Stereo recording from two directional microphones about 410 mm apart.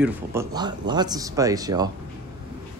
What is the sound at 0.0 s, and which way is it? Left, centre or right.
Speech, centre.